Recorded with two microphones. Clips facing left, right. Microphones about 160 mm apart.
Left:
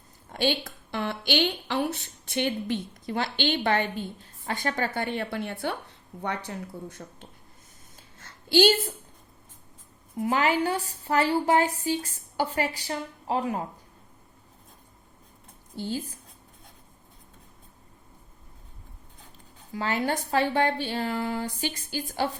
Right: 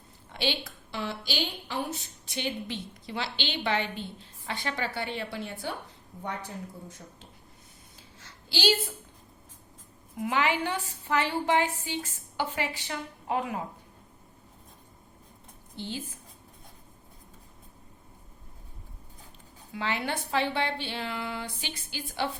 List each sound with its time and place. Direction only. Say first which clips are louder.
0.3 s a woman's voice: left 5 dB; 50° left (ahead or behind)
6.2 s speech: left 4 dB; 75° left (ahead or behind)
8.2 s a sound: left 9 dB; 55° left (ahead or behind)
10.2 s speech: left 3 dB; 40° left (ahead or behind)
15.8 s speech: left 5 dB; 40° left (ahead or behind)
19.7 s speech: left 4 dB; 40° left (ahead or behind)